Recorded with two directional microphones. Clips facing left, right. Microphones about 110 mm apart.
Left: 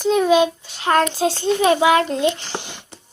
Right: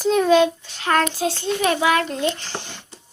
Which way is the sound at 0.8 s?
20° left (ahead or behind).